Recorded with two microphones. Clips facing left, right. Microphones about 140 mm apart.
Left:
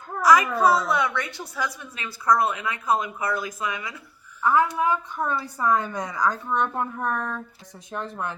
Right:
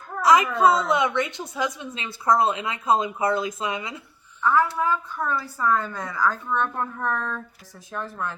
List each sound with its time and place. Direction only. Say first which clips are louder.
0.2 s a woman's voice: right 1 dB; 25° right (ahead or behind)
4.4 s a woman's voice: even; 15° left (ahead or behind)